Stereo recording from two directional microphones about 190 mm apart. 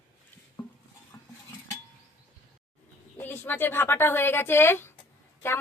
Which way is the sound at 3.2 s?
10° left (ahead or behind).